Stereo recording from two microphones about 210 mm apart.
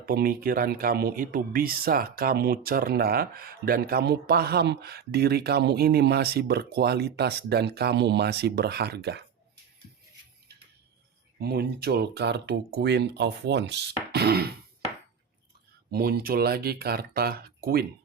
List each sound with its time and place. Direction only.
0.0 s speech: 45° right (ahead or behind)
11.3 s speech: 50° right (ahead or behind)
15.9 s speech: 45° right (ahead or behind)